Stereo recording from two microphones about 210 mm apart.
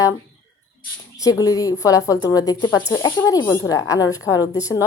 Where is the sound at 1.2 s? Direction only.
15° left (ahead or behind).